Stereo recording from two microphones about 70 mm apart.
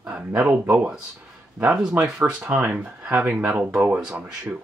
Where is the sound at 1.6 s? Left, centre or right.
Centre.